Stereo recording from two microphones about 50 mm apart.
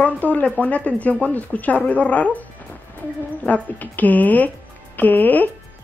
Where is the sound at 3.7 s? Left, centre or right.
Left.